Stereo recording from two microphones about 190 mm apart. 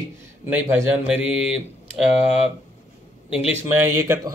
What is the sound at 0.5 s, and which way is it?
Speech, 10° right (ahead or behind).